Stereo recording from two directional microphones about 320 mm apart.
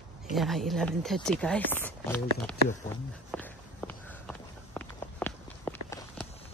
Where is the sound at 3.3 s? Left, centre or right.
Centre.